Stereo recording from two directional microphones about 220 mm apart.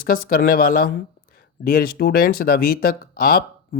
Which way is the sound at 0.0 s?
40° left (ahead or behind).